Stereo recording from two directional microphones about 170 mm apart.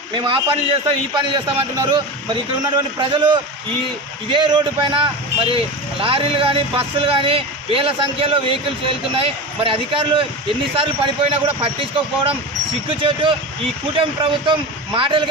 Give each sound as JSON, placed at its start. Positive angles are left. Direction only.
{"t": 0.1, "sound": "a man's voice", "side_deg": -30}
{"t": 11.6, "sound": "a man's voice", "side_deg": -30}